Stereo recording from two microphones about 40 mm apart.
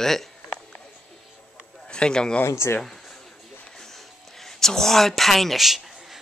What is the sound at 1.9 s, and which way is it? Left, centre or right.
Speech, left.